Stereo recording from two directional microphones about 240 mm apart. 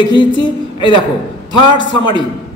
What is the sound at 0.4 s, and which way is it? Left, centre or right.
A man's voice, centre.